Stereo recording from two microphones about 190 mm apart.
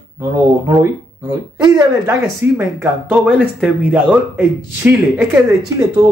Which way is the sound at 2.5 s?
10° right (ahead or behind).